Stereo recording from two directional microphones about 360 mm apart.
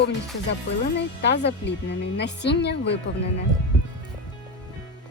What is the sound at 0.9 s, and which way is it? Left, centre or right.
Speech, left.